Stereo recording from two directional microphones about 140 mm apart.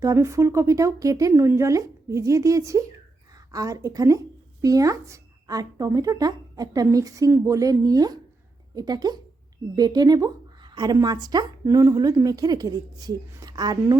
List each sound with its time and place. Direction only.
0.0 s a woman's voice: 20° right (ahead or behind)